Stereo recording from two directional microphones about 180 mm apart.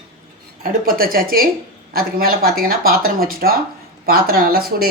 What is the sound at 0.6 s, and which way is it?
Speech, 55° right (ahead or behind).